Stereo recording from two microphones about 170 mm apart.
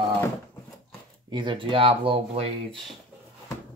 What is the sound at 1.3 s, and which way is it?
Speech, 25° right (ahead or behind).